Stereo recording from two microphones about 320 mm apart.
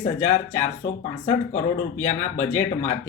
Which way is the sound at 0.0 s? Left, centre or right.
Left.